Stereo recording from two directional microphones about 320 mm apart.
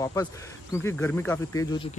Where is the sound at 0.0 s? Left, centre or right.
Centre.